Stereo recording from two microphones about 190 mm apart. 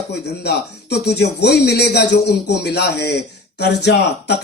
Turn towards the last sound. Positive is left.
turn(degrees=60)  # may be behind; listen again after turning